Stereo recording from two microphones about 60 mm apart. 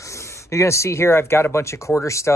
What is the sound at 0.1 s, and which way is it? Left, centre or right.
Speech, left.